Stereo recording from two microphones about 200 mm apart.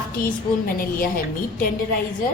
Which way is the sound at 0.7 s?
45° left (ahead or behind).